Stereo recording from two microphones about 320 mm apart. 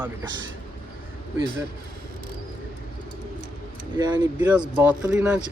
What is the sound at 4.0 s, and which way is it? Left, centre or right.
Speech, centre.